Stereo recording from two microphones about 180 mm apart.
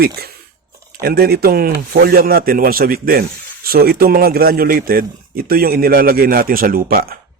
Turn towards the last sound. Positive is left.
turn(degrees=-55)  # may be behind; listen again after turning